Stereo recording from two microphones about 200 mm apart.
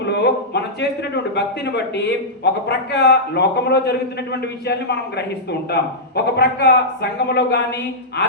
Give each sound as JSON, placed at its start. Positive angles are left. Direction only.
{"t": 0.0, "sound": "a man's voice", "side_deg": 60}